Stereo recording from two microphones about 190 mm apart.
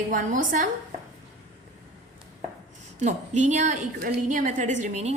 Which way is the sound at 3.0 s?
40° right (ahead or behind).